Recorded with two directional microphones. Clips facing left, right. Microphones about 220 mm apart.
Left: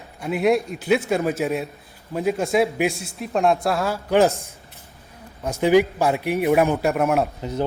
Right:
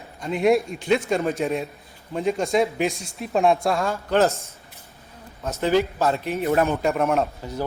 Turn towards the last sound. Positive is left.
turn(degrees=20)  # may be behind; listen again after turning